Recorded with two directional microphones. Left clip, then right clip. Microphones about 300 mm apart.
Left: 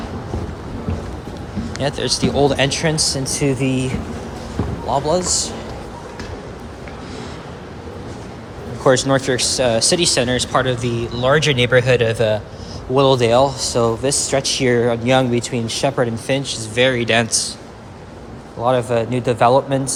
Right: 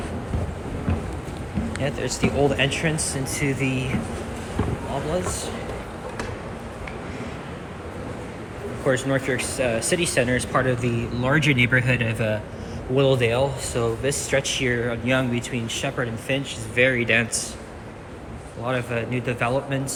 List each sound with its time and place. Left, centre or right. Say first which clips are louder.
1.8 s speech: left 7 dB; centre
8.9 s speech: left 8 dB; centre
18.6 s speech: left 9 dB; centre